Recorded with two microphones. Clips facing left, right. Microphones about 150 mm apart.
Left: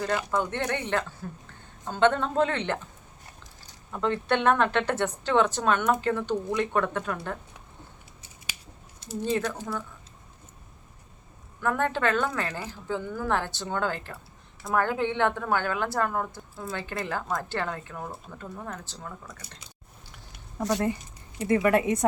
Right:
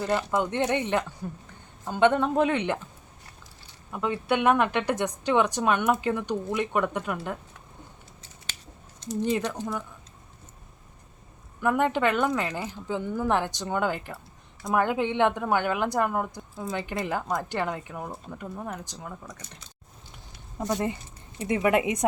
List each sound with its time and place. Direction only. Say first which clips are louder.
0.3 s a woman's voice: right 3 dB; 15° right (ahead or behind)
3.9 s a woman's voice: even; 10° right (ahead or behind)
9.2 s a woman's voice: even; 15° right (ahead or behind)
11.6 s a woman's voice: right 2 dB; 15° right (ahead or behind)
21.4 s speech: left 1 dB; 20° right (ahead or behind)